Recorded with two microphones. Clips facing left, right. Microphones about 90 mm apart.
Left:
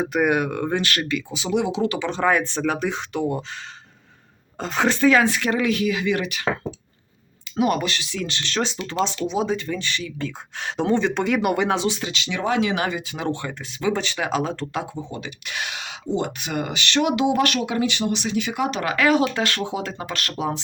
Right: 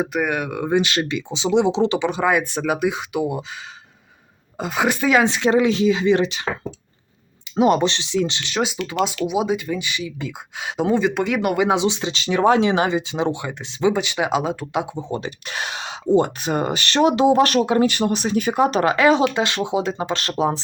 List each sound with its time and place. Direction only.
0.0 s speech: centre (ahead or behind)
0.8 s speech: 20° right (ahead or behind)
2.0 s speech: 10° right (ahead or behind)
4.5 s speech: 10° right (ahead or behind); by 6.5 s 25° right (ahead or behind)
7.5 s speech: 25° right (ahead or behind); by 11.7 s centre (ahead or behind)
11.7 s speech: 20° right (ahead or behind)
12.2 s speech: 40° right (ahead or behind); by 15.0 s 15° right (ahead or behind)
15.1 s speech: 35° right (ahead or behind)
18.9 s speech: 25° right (ahead or behind)